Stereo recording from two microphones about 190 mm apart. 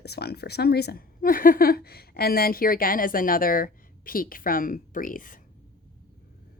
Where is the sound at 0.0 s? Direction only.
55° left (ahead or behind).